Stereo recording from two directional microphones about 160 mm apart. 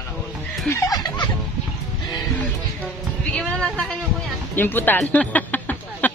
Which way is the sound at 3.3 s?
5° left (ahead or behind).